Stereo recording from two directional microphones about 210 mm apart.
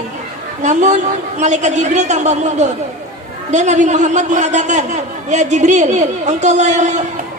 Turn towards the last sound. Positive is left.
turn(degrees=-35)  # may be behind; listen again after turning